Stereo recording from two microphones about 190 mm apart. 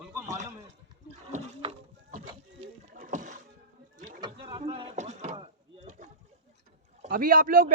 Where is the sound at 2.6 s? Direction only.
40° right (ahead or behind).